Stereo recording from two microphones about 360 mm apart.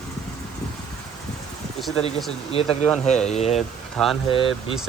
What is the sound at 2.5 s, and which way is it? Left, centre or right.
Speech, centre.